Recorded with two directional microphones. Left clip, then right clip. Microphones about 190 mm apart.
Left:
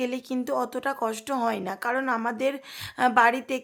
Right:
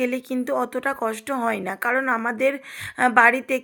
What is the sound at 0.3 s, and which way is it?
Speech, 10° right (ahead or behind).